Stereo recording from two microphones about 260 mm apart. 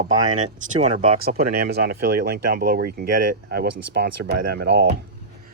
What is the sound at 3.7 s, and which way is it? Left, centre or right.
Speech, right.